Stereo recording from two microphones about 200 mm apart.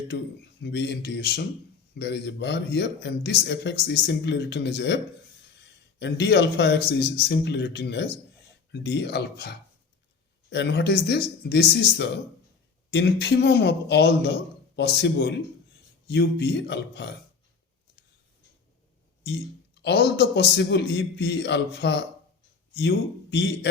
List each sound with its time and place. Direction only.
0.6 s a man's voice: 60° left (ahead or behind)
6.0 s a man's voice: 60° left (ahead or behind)
19.2 s a man's voice: 60° left (ahead or behind)